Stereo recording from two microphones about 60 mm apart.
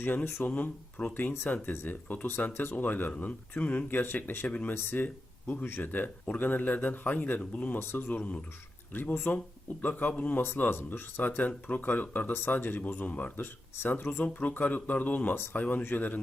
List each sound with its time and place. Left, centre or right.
0.4 s speech: left
2.5 s speech: left
2.7 s speech: left
4.7 s speech: left
5.0 s speech: left
5.6 s speech: left
5.9 s speech: left
7.8 s speech: left